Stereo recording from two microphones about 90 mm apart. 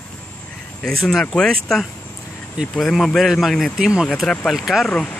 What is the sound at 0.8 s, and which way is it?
Speech, 5° left (ahead or behind).